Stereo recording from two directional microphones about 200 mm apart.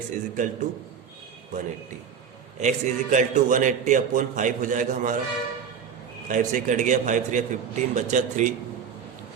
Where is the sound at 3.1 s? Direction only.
40° right (ahead or behind).